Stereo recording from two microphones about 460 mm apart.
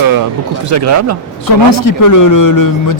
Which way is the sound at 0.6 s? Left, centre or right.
Right.